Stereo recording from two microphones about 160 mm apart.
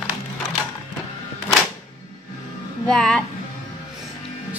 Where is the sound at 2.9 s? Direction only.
5° left (ahead or behind).